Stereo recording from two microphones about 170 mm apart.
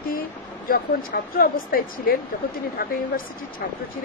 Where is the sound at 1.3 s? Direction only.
60° left (ahead or behind).